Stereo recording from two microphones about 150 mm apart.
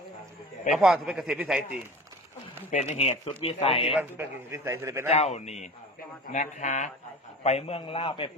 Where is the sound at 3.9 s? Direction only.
10° right (ahead or behind).